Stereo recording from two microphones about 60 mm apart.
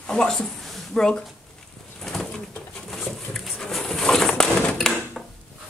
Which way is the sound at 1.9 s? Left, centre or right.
Centre.